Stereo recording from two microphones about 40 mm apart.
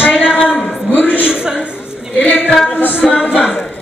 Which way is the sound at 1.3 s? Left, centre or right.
Centre.